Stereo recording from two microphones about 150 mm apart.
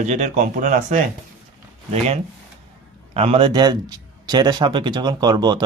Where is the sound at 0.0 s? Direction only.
50° right (ahead or behind).